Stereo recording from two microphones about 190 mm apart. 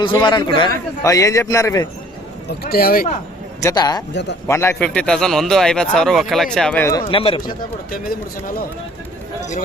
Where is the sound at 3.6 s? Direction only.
20° left (ahead or behind).